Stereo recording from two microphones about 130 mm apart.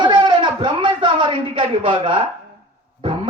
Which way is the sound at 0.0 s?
35° right (ahead or behind).